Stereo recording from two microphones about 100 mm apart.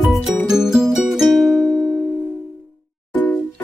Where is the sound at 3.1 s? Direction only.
15° left (ahead or behind).